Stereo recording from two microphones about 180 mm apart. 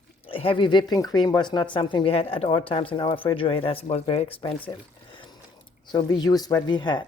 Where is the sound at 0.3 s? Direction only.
30° left (ahead or behind).